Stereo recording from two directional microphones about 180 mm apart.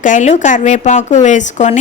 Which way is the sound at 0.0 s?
45° left (ahead or behind).